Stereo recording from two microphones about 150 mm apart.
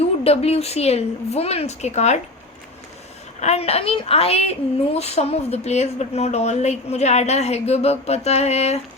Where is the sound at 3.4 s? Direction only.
45° left (ahead or behind).